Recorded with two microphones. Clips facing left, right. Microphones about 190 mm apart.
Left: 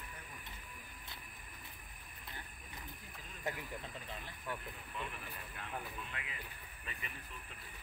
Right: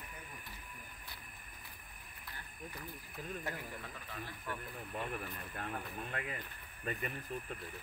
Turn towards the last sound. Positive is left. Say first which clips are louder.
# right 10 dB
turn(degrees=-50)  # may be behind; listen again after turning